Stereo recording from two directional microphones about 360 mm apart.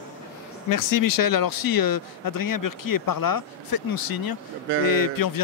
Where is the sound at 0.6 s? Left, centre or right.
Left.